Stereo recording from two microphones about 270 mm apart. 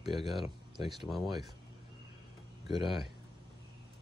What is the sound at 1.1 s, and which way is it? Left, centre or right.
Speech, centre.